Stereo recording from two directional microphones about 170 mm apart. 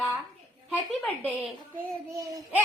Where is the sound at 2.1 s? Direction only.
20° right (ahead or behind).